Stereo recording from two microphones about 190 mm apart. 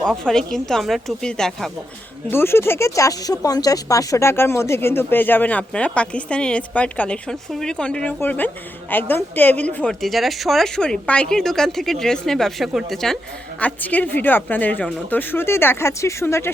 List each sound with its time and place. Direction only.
0.3 s a woman's voice: 5° left (ahead or behind)